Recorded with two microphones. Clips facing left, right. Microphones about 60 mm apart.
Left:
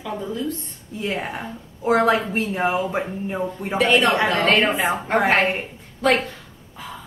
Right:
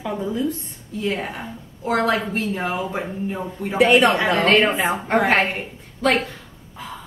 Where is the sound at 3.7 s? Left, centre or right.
Centre.